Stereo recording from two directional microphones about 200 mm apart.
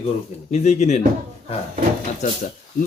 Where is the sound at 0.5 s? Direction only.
35° left (ahead or behind).